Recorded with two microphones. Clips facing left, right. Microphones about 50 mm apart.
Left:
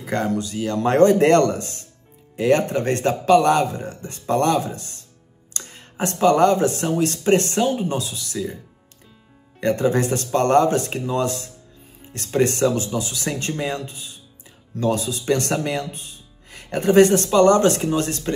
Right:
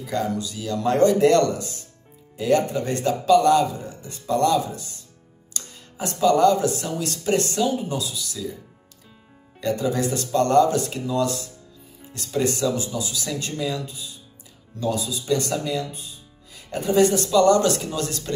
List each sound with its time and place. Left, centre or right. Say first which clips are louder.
0.0 s speech: left 2 dB; left
9.6 s speech: left 4 dB; left